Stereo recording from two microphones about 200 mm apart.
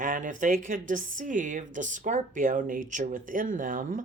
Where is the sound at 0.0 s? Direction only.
40° right (ahead or behind).